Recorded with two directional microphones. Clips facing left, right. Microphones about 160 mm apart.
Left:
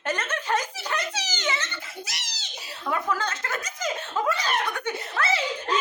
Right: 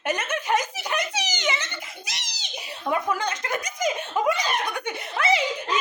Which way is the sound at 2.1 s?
20° right (ahead or behind).